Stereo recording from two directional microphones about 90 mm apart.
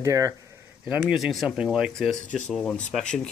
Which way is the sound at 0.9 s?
5° right (ahead or behind).